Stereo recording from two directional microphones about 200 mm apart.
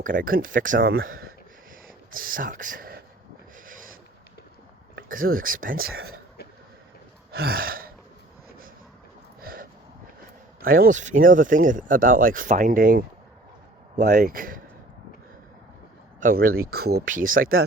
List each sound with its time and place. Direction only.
0.0 s speech: 45° right (ahead or behind)
3.7 s rub: 40° right (ahead or behind)
5.0 s speech: 45° right (ahead or behind)
7.3 s gasp: 50° right (ahead or behind)
9.4 s a sound: 45° right (ahead or behind)
10.6 s speech: 45° right (ahead or behind)
16.2 s speech: 45° right (ahead or behind)